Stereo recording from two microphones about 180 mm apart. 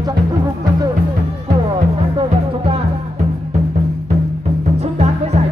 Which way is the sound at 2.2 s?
30° right (ahead or behind).